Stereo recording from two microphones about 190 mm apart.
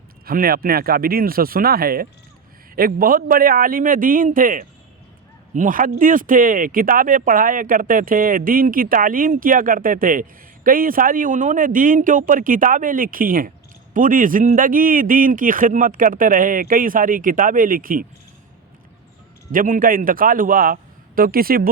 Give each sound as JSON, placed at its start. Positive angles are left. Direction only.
{"t": 0.3, "sound": "speech", "side_deg": -50}
{"t": 19.5, "sound": "speech", "side_deg": -45}